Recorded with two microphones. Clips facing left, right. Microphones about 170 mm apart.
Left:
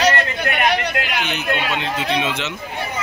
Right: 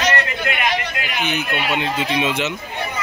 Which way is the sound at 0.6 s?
60° left (ahead or behind).